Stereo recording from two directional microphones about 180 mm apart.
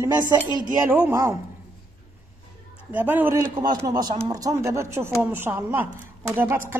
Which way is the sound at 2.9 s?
10° right (ahead or behind).